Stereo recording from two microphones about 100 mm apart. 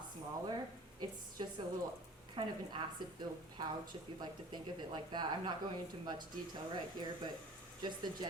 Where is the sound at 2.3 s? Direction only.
55° right (ahead or behind).